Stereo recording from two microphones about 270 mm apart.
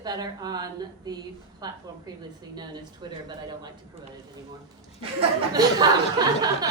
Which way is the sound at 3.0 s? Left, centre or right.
Centre.